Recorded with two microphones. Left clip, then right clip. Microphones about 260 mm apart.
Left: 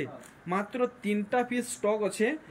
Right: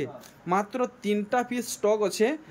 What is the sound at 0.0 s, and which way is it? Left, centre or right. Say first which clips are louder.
Speech: right 3 dB; centre.